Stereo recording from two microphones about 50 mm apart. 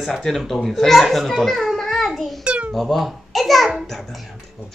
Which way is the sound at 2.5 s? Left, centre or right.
Right.